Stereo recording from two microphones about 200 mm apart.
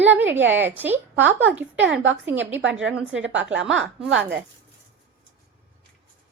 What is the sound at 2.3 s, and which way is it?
A woman's voice, 65° right (ahead or behind).